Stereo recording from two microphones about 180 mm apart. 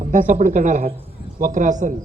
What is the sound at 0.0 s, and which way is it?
Speech, 45° right (ahead or behind).